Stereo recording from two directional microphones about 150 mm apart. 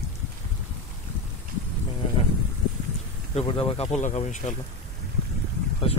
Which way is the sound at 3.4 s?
35° left (ahead or behind).